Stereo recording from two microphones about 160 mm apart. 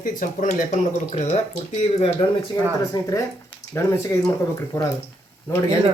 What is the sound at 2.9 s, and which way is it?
Speech, 20° left (ahead or behind).